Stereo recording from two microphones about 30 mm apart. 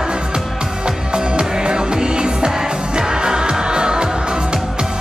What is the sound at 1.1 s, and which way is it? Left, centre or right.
Music, right.